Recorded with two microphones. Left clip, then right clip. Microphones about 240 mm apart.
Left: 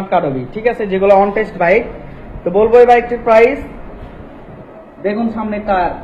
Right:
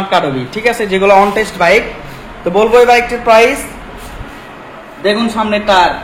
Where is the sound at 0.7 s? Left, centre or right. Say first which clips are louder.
Right 2 dB; right.